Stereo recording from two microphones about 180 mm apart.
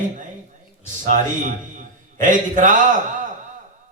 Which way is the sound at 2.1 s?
45° right (ahead or behind).